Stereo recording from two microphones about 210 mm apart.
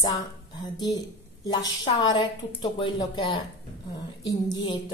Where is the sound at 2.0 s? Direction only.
20° left (ahead or behind).